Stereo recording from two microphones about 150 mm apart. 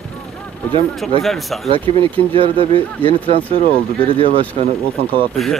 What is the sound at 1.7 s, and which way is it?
Speech, 40° right (ahead or behind).